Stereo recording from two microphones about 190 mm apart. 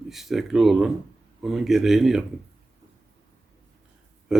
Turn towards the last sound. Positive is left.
turn(degrees=0)  # may be behind; listen again after turning